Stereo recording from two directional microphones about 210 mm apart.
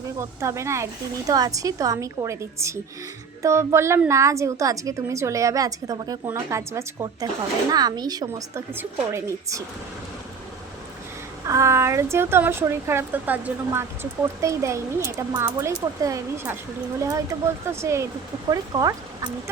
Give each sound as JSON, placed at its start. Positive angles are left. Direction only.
{"t": 0.2, "sound": "speech", "side_deg": -15}
{"t": 11.4, "sound": "speech", "side_deg": -15}